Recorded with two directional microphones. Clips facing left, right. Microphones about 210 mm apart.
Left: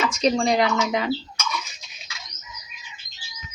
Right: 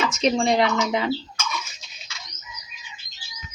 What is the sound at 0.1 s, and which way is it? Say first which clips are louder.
Speech: even; 25° right (ahead or behind).